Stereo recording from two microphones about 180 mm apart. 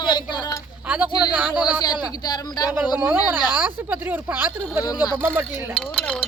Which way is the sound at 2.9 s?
10° right (ahead or behind).